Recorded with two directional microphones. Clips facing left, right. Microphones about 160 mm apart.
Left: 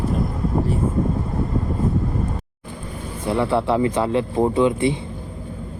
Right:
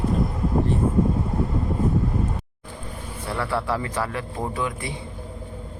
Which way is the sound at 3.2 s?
20° left (ahead or behind).